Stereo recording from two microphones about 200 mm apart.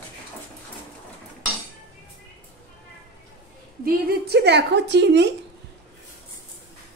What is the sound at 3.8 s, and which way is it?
Speech, 55° right (ahead or behind).